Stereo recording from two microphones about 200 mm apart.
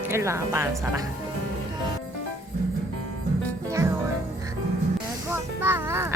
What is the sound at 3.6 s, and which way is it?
Music, 15° right (ahead or behind).